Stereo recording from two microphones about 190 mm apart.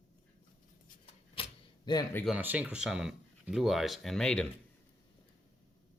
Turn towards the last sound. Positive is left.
turn(degrees=5)  # may be behind; listen again after turning